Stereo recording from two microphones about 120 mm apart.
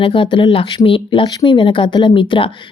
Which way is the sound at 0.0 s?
45° left (ahead or behind).